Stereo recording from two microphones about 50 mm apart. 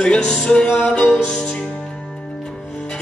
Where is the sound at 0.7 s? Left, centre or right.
Left.